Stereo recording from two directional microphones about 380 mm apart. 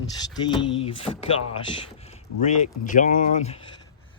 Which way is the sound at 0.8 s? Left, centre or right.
Centre.